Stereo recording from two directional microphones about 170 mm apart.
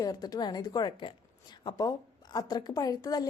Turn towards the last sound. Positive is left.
turn(degrees=20)  # may be behind; listen again after turning